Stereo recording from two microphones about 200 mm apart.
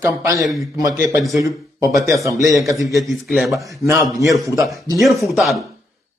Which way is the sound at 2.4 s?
Centre (ahead or behind).